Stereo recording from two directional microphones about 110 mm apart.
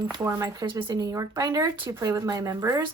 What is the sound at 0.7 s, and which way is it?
Speech, 50° right (ahead or behind).